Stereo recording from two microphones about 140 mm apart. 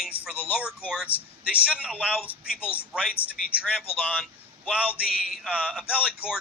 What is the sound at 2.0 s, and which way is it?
Speech, 5° right (ahead or behind).